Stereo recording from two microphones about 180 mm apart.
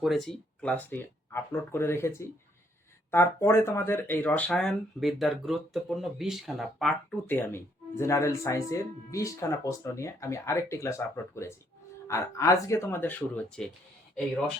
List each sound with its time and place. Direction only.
0.0 s speech: centre (ahead or behind)
7.3 s speech: 10° left (ahead or behind)